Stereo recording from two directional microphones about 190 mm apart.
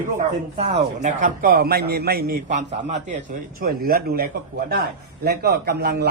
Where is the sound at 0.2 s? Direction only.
35° right (ahead or behind); by 2.4 s 55° right (ahead or behind).